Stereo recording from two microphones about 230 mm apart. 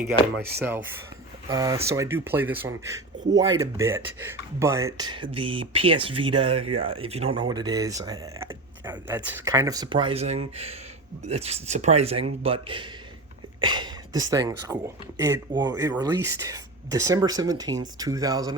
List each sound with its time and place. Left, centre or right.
1.5 s speech: centre